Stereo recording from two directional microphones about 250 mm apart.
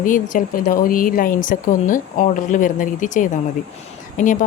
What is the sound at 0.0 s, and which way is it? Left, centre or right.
A woman's voice, left.